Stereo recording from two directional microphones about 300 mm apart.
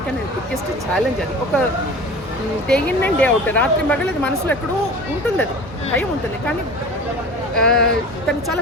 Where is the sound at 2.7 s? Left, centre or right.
Centre.